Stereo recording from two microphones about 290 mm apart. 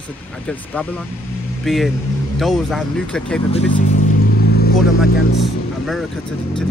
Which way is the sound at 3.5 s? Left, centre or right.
Left.